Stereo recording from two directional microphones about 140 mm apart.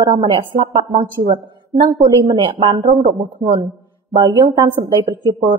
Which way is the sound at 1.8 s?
25° right (ahead or behind).